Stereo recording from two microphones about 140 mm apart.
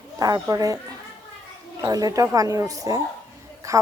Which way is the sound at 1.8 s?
25° right (ahead or behind).